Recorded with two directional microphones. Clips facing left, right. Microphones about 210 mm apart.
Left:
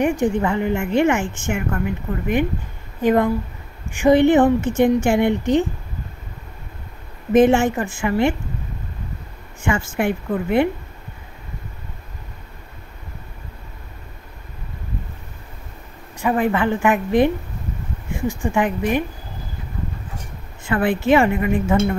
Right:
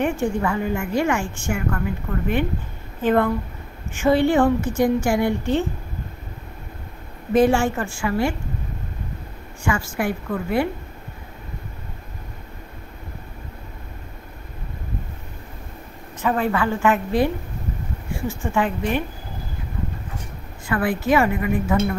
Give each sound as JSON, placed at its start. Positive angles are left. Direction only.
{"t": 0.0, "sound": "a woman's voice", "side_deg": 15}
{"t": 7.3, "sound": "a woman's voice", "side_deg": 20}
{"t": 9.6, "sound": "a woman's voice", "side_deg": 25}
{"t": 16.2, "sound": "a woman's voice", "side_deg": 15}
{"t": 20.6, "sound": "a woman's voice", "side_deg": 25}